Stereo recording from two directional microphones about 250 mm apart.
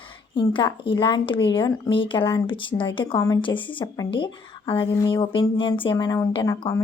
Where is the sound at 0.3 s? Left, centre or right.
Centre.